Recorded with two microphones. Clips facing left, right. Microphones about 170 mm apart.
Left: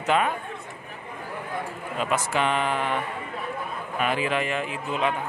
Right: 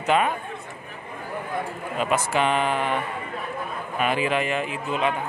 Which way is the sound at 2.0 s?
10° right (ahead or behind).